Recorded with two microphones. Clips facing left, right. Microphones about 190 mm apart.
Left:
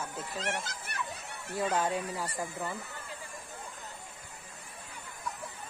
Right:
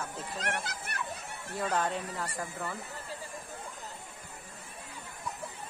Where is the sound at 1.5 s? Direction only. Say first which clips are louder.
Left 1 dB; 5° left (ahead or behind).